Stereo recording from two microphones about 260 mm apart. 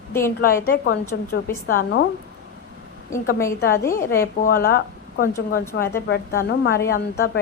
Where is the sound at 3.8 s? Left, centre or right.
Centre.